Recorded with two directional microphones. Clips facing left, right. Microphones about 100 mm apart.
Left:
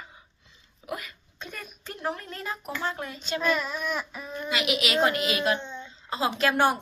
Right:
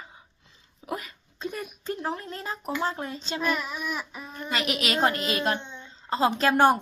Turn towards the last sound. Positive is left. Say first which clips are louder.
# right 3 dB
turn(degrees=-40)  # may be behind; listen again after turning